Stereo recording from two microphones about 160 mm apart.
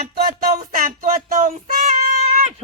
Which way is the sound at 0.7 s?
55° right (ahead or behind).